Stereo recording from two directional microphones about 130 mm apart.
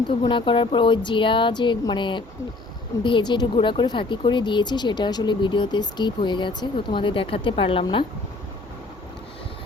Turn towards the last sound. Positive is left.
turn(degrees=45)  # may be behind; listen again after turning